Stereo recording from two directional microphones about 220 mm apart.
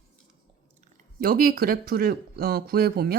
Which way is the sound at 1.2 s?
40° right (ahead or behind).